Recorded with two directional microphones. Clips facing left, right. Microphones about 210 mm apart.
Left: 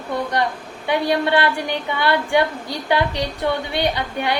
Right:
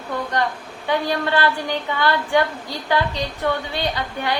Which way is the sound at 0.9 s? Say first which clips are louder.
Left 3 dB; 15° left (ahead or behind).